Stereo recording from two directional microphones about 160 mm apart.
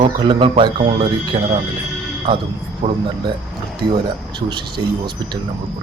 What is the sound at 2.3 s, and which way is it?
Speech, 30° right (ahead or behind).